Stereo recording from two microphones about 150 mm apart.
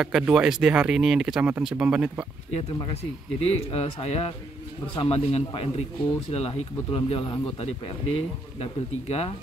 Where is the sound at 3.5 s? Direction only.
40° left (ahead or behind).